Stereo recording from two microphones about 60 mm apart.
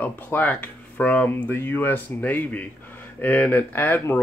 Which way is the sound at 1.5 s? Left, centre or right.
Left.